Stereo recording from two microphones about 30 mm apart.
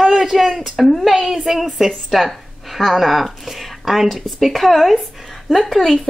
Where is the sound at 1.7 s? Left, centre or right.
Centre.